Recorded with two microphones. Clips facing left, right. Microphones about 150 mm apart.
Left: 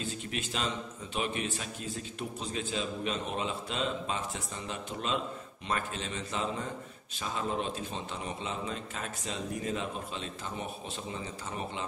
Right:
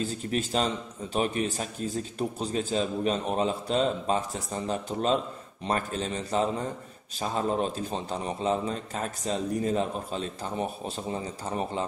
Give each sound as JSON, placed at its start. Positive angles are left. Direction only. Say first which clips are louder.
{"t": 0.0, "sound": "a man's voice", "louder": "right 7 dB", "side_deg": -40}